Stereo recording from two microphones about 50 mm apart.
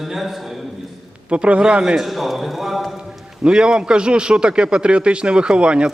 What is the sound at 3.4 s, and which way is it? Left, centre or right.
A man's voice, centre.